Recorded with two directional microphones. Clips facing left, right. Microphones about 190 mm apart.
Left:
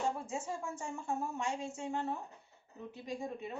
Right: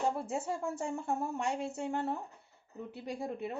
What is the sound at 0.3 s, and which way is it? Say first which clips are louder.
Speech: right 4 dB; 60° right (ahead or behind).